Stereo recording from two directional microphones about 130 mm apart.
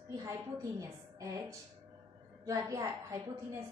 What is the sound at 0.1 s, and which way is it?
A woman's voice, 25° right (ahead or behind).